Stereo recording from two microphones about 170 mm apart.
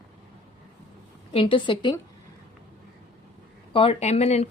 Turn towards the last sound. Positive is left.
turn(degrees=40)  # may be behind; listen again after turning